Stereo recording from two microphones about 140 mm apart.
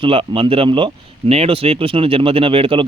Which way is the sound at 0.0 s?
40° right (ahead or behind).